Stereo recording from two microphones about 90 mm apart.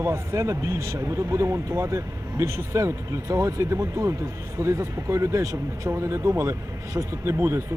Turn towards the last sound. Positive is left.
turn(degrees=-30)  # may be behind; listen again after turning